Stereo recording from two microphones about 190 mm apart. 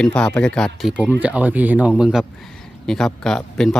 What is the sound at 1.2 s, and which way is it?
A man's voice, 10° right (ahead or behind).